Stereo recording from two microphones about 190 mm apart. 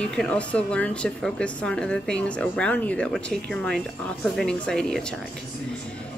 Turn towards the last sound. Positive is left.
turn(degrees=5)  # may be behind; listen again after turning